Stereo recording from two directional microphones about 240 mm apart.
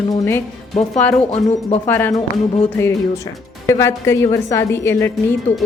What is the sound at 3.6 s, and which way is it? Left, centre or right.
A woman's voice, centre.